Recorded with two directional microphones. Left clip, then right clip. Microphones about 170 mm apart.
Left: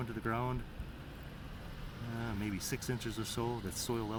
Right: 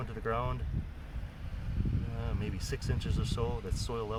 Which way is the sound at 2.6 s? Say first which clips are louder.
Even; 40° right (ahead or behind).